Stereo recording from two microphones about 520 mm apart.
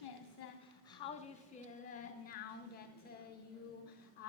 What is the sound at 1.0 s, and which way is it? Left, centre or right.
Speech, centre.